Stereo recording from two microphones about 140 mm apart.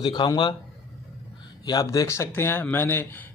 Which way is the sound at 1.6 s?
25° left (ahead or behind).